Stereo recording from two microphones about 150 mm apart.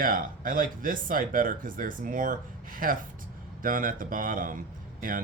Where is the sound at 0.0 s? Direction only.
70° right (ahead or behind).